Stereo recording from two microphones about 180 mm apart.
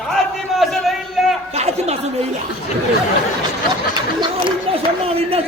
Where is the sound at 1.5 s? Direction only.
35° right (ahead or behind).